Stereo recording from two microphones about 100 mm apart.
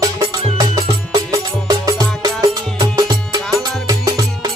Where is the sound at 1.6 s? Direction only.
40° right (ahead or behind).